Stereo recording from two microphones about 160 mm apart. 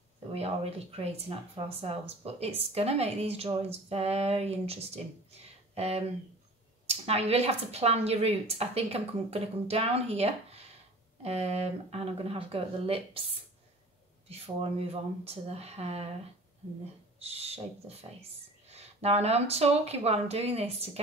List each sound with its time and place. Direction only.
0.3 s a woman's voice: 40° right (ahead or behind)
17.2 s a woman's voice: 40° right (ahead or behind)